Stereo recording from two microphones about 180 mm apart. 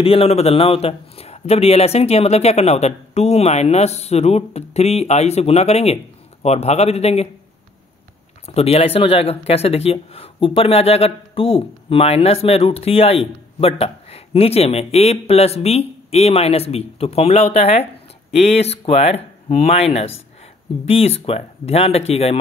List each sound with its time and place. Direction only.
0.0 s speech: 30° left (ahead or behind)
8.5 s speech: 35° left (ahead or behind)